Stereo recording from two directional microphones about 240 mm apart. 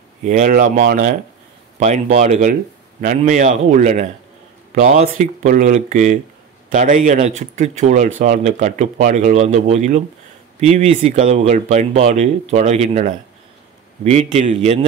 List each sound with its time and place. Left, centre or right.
0.2 s speech: right